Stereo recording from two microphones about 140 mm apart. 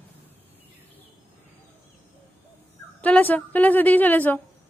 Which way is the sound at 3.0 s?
10° left (ahead or behind).